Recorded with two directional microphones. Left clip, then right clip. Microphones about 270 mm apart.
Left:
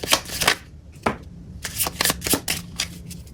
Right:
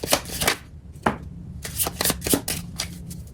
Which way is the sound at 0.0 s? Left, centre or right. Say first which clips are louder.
Left 2 dB; centre.